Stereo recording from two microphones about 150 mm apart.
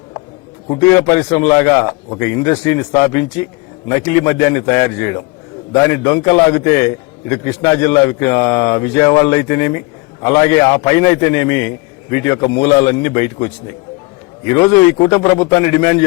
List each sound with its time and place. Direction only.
0.8 s a man's voice: 15° left (ahead or behind)